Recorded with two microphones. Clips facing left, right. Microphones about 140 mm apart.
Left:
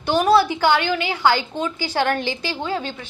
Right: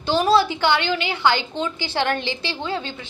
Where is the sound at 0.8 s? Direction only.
20° right (ahead or behind).